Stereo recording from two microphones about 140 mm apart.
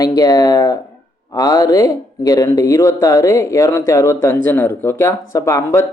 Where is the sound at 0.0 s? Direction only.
25° left (ahead or behind).